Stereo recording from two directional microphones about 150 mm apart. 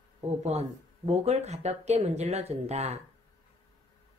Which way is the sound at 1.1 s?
45° right (ahead or behind).